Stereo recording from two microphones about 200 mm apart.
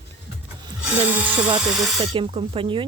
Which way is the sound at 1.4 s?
25° right (ahead or behind).